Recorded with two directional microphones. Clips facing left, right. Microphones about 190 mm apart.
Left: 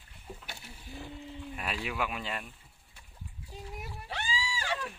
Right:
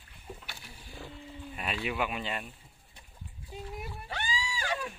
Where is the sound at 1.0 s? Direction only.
Centre (ahead or behind).